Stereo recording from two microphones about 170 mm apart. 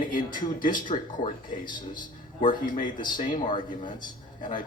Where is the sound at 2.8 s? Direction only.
25° left (ahead or behind).